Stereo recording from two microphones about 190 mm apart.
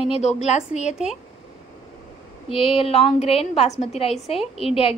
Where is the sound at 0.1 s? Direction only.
35° left (ahead or behind).